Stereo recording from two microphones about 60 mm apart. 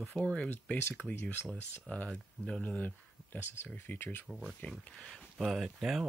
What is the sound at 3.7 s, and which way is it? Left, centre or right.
Speech, left.